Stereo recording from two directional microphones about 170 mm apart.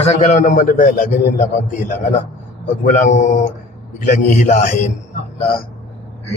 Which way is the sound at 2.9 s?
50° left (ahead or behind).